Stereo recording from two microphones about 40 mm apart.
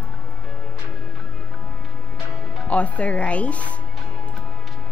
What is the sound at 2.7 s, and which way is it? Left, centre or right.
A woman's voice, left.